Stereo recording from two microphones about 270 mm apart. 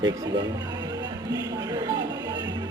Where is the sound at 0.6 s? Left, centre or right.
Centre.